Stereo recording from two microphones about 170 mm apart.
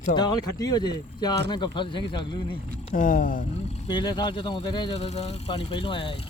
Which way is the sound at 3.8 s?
25° left (ahead or behind).